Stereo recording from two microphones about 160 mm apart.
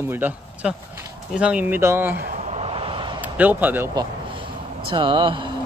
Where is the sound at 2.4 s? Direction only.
40° right (ahead or behind).